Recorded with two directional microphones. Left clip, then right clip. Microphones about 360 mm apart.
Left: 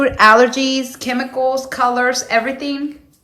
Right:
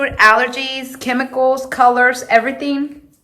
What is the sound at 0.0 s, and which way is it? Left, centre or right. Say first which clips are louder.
A woman's voice: left 2 dB; centre.